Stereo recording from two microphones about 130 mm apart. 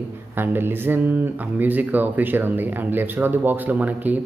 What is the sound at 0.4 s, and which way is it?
Speech, 15° right (ahead or behind).